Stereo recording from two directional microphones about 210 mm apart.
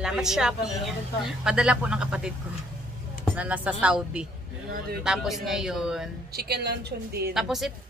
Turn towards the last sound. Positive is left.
turn(degrees=0)  # may be behind; listen again after turning